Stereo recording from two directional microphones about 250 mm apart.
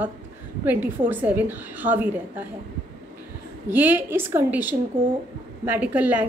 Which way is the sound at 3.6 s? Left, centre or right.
Centre.